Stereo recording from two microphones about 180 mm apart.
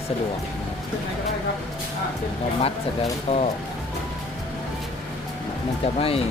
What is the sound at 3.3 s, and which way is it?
Speech, 35° left (ahead or behind).